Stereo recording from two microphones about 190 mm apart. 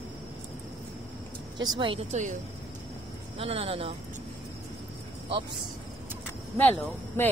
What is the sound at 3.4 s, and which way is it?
Speech, 30° right (ahead or behind).